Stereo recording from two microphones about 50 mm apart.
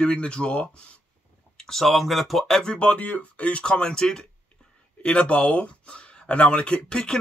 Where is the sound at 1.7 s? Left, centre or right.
Centre.